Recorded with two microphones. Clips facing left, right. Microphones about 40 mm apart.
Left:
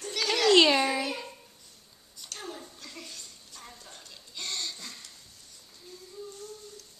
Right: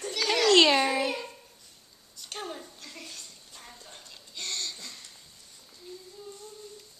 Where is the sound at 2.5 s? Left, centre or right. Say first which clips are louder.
Even; centre.